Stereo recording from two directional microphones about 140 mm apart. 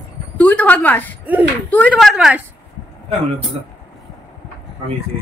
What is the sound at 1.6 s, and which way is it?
Speech, 10° left (ahead or behind).